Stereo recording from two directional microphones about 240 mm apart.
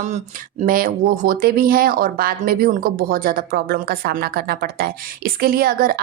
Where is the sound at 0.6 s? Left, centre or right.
Right.